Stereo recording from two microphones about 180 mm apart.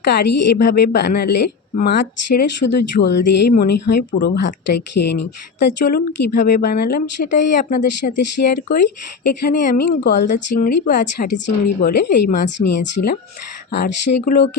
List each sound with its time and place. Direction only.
0.0 s speech: 70° left (ahead or behind); by 9.8 s 50° left (ahead or behind)
10.0 s speech: 65° left (ahead or behind)
10.2 s a woman's voice: 50° left (ahead or behind)
11.8 s speech: 60° left (ahead or behind)
12.5 s speech: 75° left (ahead or behind); by 14.5 s 55° left (ahead or behind)